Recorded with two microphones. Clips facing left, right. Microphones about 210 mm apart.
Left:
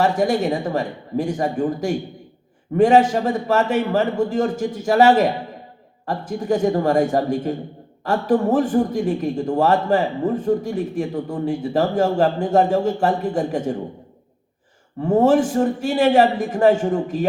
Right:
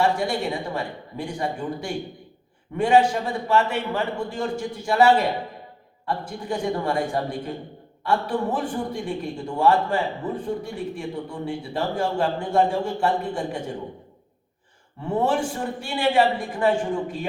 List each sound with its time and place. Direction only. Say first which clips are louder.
0.0 s a man's voice: left 5 dB; 45° left (ahead or behind)
15.0 s a man's voice: left 8 dB; 45° left (ahead or behind)